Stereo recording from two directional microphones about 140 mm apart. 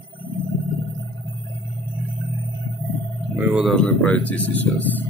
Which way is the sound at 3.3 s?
10° right (ahead or behind).